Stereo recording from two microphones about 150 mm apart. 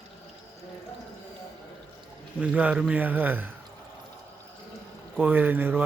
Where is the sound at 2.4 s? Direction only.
10° right (ahead or behind).